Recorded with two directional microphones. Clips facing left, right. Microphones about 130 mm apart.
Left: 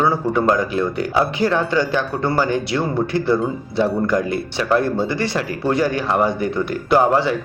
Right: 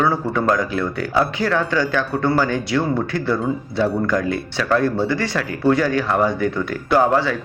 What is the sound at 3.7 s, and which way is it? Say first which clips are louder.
Speech: left 2 dB; 20° left (ahead or behind).